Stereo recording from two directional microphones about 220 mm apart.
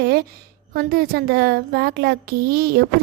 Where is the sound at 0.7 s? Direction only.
40° right (ahead or behind).